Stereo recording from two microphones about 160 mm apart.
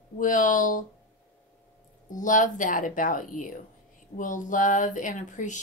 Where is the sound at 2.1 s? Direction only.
50° left (ahead or behind).